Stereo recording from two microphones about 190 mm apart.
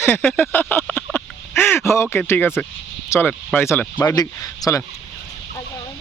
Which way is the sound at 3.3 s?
Centre (ahead or behind).